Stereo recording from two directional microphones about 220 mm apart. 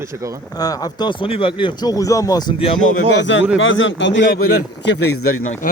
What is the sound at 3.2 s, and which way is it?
Speech, 55° left (ahead or behind).